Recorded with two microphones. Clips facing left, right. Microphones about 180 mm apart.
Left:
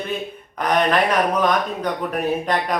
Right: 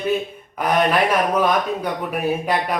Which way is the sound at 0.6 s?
10° right (ahead or behind).